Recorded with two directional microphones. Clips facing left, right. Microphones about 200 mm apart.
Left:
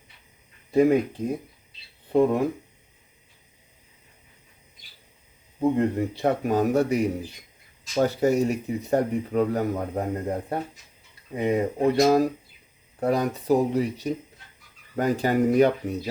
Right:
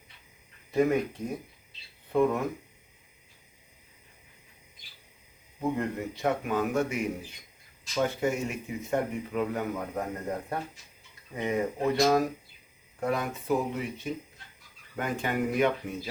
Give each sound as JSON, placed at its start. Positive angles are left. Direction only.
{"t": 0.7, "sound": "speech", "side_deg": 30}
{"t": 5.5, "sound": "speech", "side_deg": 30}